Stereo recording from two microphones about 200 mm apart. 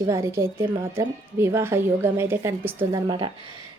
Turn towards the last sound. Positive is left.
turn(degrees=-25)  # may be behind; listen again after turning